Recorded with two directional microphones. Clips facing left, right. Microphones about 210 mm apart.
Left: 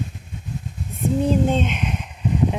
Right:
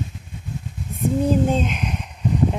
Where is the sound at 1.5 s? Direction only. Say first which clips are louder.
Even; centre (ahead or behind).